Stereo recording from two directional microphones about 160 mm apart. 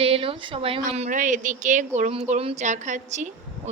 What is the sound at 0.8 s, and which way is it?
A woman's voice, 45° right (ahead or behind).